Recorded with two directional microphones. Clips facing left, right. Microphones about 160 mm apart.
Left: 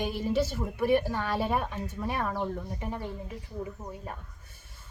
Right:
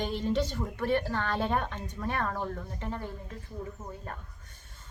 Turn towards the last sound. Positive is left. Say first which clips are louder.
# left 2 dB
turn(degrees=15)  # may be behind; listen again after turning